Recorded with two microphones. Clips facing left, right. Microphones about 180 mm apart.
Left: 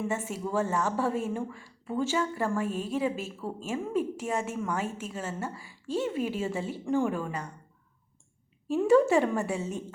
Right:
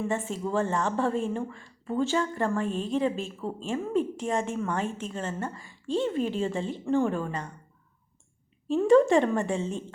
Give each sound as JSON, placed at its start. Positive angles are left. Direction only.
{"t": 0.1, "sound": "a woman's voice", "side_deg": 10}
{"t": 8.6, "sound": "a woman's voice", "side_deg": 10}